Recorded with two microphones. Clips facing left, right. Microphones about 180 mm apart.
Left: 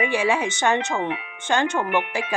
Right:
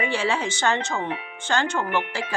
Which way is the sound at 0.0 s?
15° left (ahead or behind).